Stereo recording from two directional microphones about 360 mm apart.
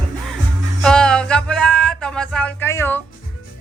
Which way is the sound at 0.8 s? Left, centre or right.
Centre.